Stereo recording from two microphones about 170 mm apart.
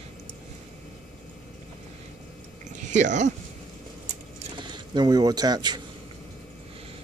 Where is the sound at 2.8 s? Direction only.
45° right (ahead or behind).